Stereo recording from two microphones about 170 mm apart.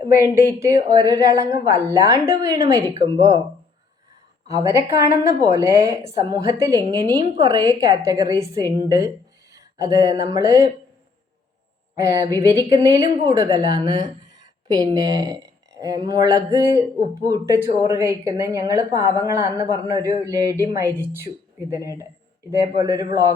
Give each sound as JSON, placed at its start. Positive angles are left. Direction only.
{"t": 0.1, "sound": "a woman's voice", "side_deg": -15}
{"t": 4.5, "sound": "a woman's voice", "side_deg": -15}
{"t": 11.9, "sound": "a woman's voice", "side_deg": -20}